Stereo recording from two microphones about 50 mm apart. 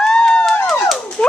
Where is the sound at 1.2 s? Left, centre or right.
Left.